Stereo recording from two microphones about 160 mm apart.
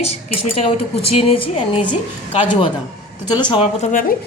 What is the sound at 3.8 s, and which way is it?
Speech, 55° left (ahead or behind).